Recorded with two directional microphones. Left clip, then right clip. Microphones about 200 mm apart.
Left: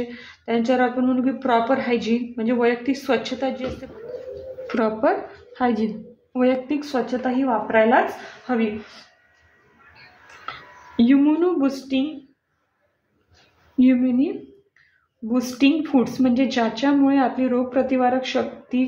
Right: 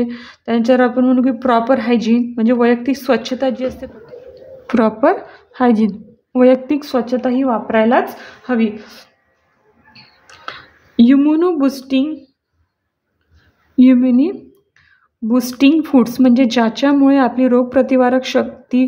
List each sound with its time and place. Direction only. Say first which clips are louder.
0.1 s a woman's voice: right 5 dB; 60° right (ahead or behind)
11.0 s a woman's voice: right 6 dB; 55° right (ahead or behind)
13.7 s a woman's voice: right 7 dB; 60° right (ahead or behind)